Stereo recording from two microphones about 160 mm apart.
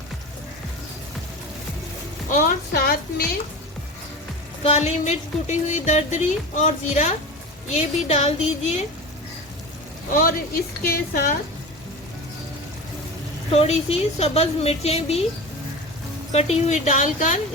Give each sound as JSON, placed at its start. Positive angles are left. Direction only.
{"t": 2.3, "sound": "speech", "side_deg": 60}
{"t": 4.6, "sound": "speech", "side_deg": 45}
{"t": 10.1, "sound": "speech", "side_deg": 65}
{"t": 13.5, "sound": "a woman's voice", "side_deg": 40}
{"t": 16.3, "sound": "speech", "side_deg": 40}